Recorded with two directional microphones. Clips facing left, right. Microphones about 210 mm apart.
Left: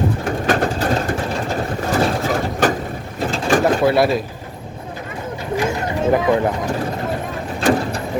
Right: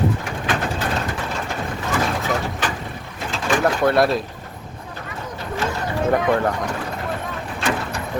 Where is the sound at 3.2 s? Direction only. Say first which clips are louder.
Left 5 dB; 50° left (ahead or behind).